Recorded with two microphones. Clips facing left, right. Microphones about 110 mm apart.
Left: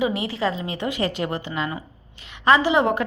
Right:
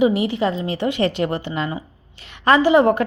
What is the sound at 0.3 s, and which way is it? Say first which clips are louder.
A woman's voice: right 4 dB; 25° right (ahead or behind).